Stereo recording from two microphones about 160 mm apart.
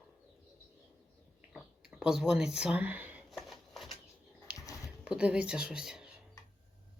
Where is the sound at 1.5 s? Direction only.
5° right (ahead or behind).